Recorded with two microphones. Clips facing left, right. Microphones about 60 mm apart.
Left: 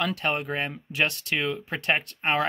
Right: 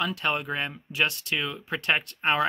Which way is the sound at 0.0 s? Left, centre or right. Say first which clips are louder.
Left 1 dB; left.